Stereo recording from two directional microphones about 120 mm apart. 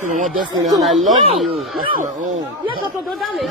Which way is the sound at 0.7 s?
Centre (ahead or behind).